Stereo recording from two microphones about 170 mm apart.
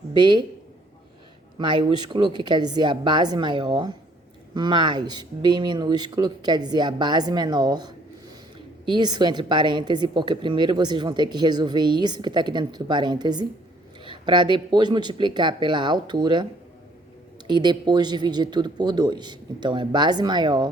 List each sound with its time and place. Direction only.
0.1 s a man's voice: 25° right (ahead or behind)
1.5 s a woman's voice: 25° right (ahead or behind)